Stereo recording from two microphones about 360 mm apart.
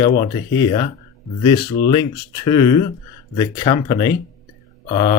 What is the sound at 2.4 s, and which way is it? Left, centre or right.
Speech, centre.